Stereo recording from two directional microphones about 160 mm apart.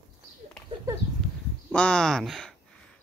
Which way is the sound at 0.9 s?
20° right (ahead or behind).